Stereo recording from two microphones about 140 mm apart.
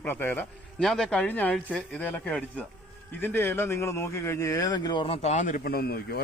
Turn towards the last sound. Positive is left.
turn(degrees=90)